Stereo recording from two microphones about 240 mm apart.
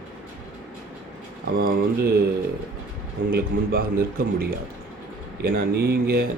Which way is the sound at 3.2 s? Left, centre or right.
Right.